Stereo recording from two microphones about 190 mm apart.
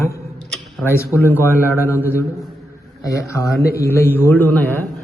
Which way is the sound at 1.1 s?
10° left (ahead or behind).